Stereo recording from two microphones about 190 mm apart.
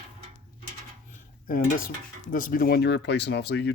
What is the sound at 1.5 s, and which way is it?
Speech, 50° left (ahead or behind).